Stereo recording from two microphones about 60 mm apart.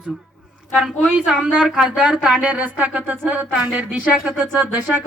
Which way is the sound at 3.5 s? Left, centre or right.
Centre.